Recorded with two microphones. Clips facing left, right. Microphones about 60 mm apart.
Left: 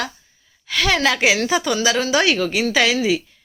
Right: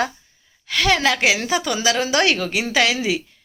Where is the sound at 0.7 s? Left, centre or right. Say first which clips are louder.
Even; centre.